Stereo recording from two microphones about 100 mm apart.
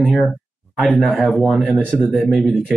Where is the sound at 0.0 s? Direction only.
Centre (ahead or behind).